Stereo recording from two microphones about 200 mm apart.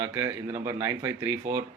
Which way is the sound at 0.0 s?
10° right (ahead or behind).